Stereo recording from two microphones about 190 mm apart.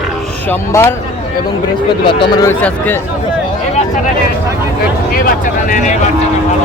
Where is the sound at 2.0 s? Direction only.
25° left (ahead or behind).